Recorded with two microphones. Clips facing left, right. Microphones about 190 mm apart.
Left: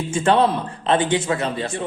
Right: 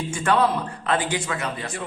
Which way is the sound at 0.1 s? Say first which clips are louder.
Left 4 dB; 25° left (ahead or behind).